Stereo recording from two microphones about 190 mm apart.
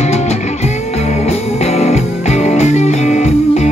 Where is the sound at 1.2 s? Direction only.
35° left (ahead or behind).